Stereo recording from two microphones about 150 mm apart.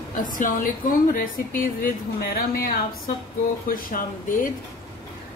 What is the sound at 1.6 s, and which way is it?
Speech, 80° left.